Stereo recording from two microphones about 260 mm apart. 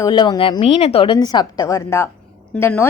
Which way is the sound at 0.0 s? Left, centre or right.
Centre.